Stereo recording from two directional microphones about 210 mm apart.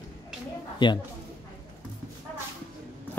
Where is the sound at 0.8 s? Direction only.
20° left (ahead or behind).